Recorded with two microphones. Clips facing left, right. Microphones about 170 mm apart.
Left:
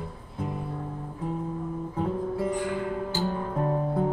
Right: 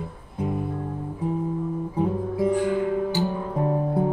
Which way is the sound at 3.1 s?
15° right (ahead or behind).